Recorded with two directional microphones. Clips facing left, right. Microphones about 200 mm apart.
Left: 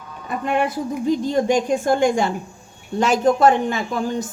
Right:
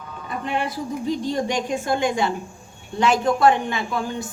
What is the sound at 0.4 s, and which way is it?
A woman's voice, 50° left (ahead or behind).